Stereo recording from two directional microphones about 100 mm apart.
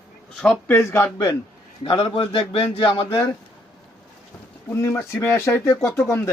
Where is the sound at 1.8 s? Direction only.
70° left (ahead or behind).